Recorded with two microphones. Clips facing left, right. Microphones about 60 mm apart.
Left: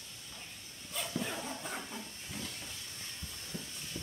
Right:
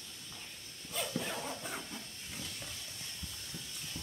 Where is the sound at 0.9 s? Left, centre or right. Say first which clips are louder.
Even; centre.